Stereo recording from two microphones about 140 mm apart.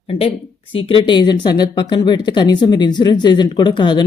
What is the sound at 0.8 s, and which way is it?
Speech, 40° left (ahead or behind).